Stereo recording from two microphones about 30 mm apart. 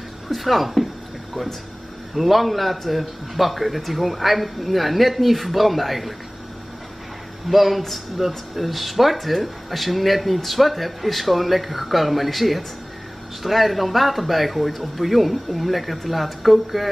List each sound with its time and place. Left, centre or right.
0.3 s speech: centre
2.1 s speech: centre
7.4 s speech: centre